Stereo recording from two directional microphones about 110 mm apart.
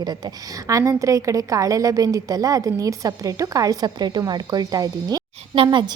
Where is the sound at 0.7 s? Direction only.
30° right (ahead or behind).